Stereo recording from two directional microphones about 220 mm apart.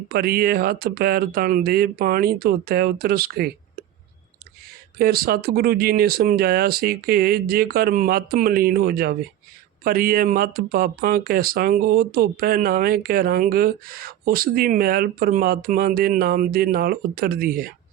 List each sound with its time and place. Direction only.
0.1 s speech: 45° right (ahead or behind)
4.9 s speech: 45° right (ahead or behind)